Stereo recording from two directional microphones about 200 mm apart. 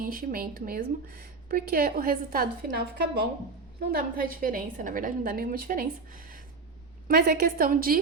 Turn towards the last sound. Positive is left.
turn(degrees=-45)  # may be behind; listen again after turning